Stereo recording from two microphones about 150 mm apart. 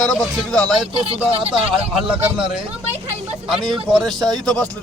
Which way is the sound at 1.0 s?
35° right (ahead or behind).